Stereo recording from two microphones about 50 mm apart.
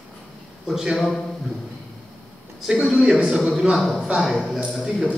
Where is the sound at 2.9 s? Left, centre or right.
Centre.